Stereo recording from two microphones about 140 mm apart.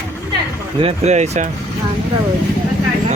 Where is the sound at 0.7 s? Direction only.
45° right (ahead or behind).